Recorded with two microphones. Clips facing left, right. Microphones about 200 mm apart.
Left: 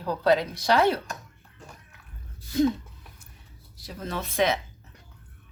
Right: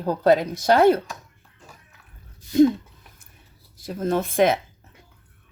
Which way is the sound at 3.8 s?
50° right (ahead or behind).